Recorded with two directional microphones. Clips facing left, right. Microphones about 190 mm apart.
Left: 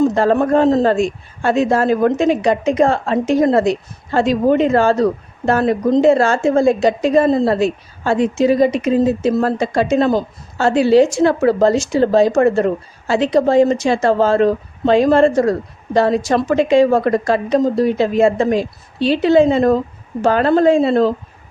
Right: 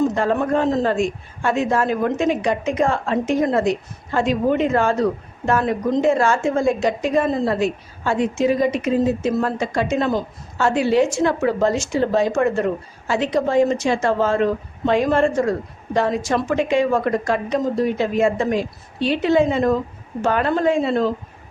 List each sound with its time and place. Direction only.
0.1 s a woman's voice: 35° left (ahead or behind)